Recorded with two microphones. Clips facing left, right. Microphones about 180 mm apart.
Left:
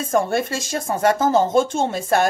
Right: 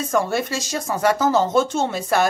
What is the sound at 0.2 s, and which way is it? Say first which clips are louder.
Speech: left 1 dB; 55° left (ahead or behind).